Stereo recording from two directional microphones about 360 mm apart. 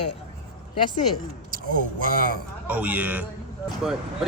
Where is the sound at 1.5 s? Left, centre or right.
Right.